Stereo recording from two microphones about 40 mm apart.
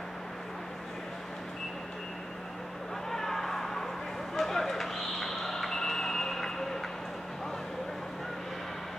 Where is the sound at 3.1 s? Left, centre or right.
Centre.